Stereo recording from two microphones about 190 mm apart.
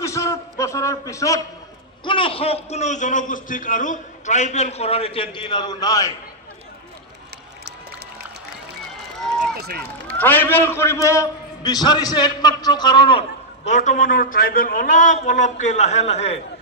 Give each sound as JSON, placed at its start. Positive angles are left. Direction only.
{"t": 0.0, "sound": "a sound", "side_deg": 15}
{"t": 2.0, "sound": "a man's voice", "side_deg": 25}
{"t": 9.2, "sound": "run", "side_deg": 0}
{"t": 9.6, "sound": "speech", "side_deg": -55}
{"t": 10.1, "sound": "a man's voice", "side_deg": 10}
{"t": 13.7, "sound": "a man's voice", "side_deg": 40}